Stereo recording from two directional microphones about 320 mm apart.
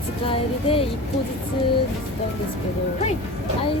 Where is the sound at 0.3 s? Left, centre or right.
Centre.